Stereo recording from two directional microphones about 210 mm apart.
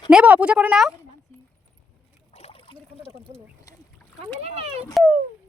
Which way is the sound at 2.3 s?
30° left (ahead or behind).